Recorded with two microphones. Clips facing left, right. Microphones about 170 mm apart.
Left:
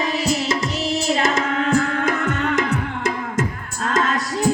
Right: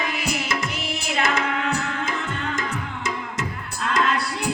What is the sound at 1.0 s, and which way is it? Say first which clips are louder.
Child singing: left 1 dB; 40° left (ahead or behind).